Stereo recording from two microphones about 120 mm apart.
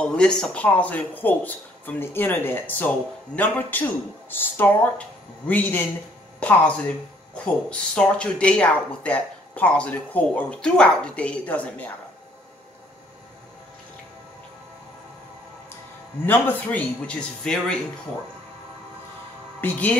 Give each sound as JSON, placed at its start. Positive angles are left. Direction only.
{"t": 0.0, "sound": "speech", "side_deg": 10}
{"t": 7.7, "sound": "speech", "side_deg": 5}
{"t": 16.3, "sound": "speech", "side_deg": 15}
{"t": 19.6, "sound": "speech", "side_deg": 10}